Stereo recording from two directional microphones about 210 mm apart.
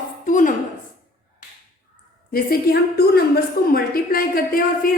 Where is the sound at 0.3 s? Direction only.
40° left (ahead or behind).